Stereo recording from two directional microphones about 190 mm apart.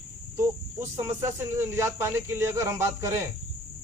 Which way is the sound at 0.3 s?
15° right (ahead or behind).